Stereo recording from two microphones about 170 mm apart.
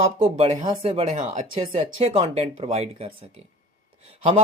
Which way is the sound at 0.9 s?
45° right (ahead or behind).